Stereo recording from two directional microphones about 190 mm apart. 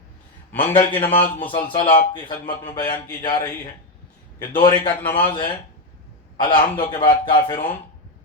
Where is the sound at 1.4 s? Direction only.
25° left (ahead or behind).